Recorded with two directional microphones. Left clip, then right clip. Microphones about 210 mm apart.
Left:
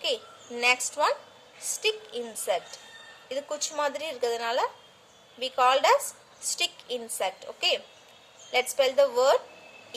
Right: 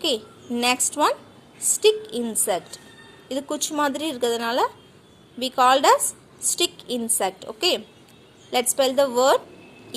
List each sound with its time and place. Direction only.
0.0 s a woman's voice: 35° right (ahead or behind)